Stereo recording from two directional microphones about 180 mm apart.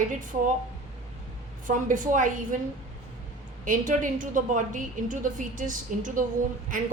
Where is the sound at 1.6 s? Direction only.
45° right (ahead or behind).